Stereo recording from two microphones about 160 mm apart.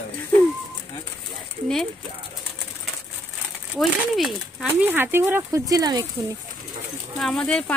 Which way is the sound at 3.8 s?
Centre (ahead or behind).